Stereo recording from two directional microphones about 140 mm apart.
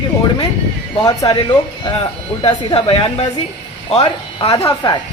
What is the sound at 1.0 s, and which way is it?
Speech, 25° left (ahead or behind).